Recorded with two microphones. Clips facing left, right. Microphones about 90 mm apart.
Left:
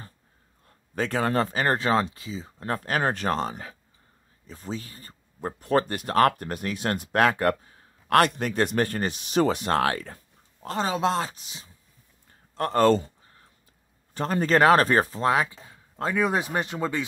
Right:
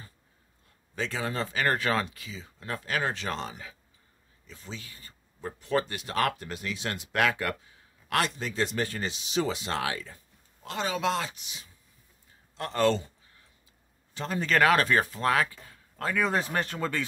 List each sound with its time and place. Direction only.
0.7 s a man's voice: 50° left (ahead or behind)
1.5 s speech: 35° left (ahead or behind); by 10.2 s 55° left (ahead or behind)
10.6 s speech: 40° left (ahead or behind)
12.5 s a sound: 45° left (ahead or behind)
14.1 s speech: 45° left (ahead or behind)
14.5 s speech: 35° left (ahead or behind); by 17.0 s 15° left (ahead or behind)